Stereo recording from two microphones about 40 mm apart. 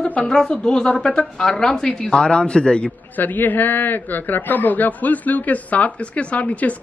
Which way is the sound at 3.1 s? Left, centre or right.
Left.